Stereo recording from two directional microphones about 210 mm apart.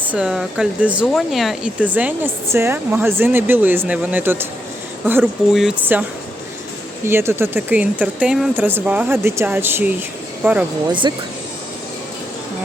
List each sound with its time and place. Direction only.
0.1 s speech: 5° right (ahead or behind)
11.0 s speech: 20° right (ahead or behind)